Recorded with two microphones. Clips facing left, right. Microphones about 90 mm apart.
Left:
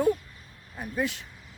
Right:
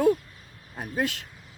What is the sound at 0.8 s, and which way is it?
Speech, 65° right (ahead or behind).